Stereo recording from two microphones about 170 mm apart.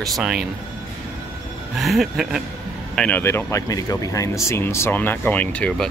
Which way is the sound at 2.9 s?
10° left (ahead or behind).